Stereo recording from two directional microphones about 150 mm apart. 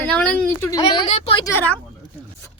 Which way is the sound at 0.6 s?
25° left (ahead or behind).